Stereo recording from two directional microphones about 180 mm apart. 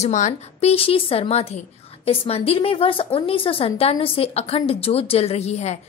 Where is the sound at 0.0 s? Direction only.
40° left (ahead or behind).